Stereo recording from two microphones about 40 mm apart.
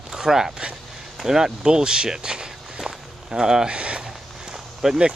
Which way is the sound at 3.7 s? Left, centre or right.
Right.